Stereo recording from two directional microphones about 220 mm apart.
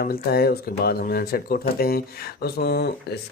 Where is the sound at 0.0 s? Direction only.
45° left (ahead or behind).